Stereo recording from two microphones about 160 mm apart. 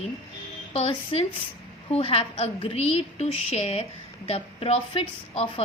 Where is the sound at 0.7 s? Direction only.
40° left (ahead or behind).